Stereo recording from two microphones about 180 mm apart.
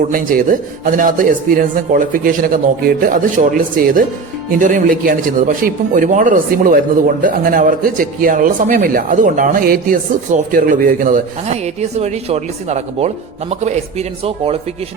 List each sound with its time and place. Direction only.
0.1 s a man's voice: 50° right (ahead or behind)
4.5 s a man's voice: 50° right (ahead or behind); by 14.6 s 35° right (ahead or behind)